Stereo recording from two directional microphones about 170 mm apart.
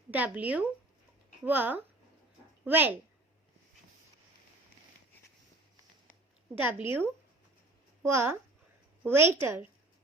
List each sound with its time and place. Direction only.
0.1 s speech: 10° right (ahead or behind)
6.6 s speech: 10° right (ahead or behind)
8.0 s speech: 15° right (ahead or behind)